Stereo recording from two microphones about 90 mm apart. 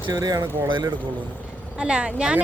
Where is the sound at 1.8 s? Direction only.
10° right (ahead or behind).